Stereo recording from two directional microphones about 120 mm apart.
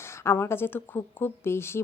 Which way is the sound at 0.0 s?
20° left (ahead or behind).